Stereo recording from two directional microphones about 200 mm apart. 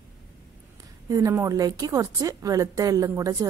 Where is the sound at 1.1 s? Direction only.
15° right (ahead or behind).